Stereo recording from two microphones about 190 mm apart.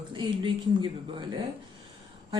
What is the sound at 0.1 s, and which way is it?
Speech, 25° right (ahead or behind).